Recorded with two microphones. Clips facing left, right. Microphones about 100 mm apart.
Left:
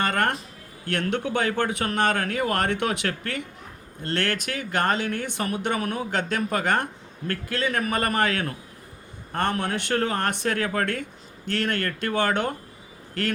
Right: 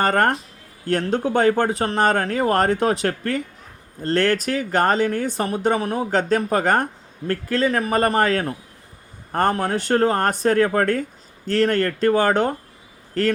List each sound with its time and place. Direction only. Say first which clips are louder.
0.0 s speech: right 6 dB; 40° right (ahead or behind)